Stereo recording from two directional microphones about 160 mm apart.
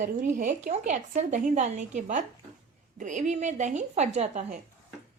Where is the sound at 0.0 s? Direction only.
55° right (ahead or behind).